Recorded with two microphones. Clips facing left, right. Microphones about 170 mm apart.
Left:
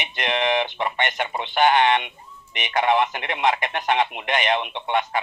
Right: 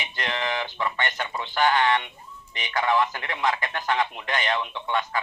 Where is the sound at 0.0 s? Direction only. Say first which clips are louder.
Left 6 dB; 20° left (ahead or behind).